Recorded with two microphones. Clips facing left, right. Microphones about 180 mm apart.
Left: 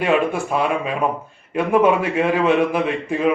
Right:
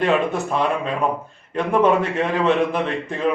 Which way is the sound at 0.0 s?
10° left (ahead or behind).